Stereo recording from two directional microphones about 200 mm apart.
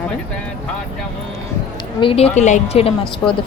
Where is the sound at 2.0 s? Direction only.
30° left (ahead or behind).